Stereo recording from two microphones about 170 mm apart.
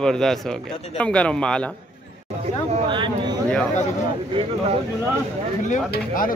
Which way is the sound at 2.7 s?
30° right (ahead or behind).